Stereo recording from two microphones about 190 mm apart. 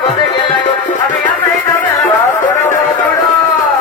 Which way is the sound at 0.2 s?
25° left (ahead or behind).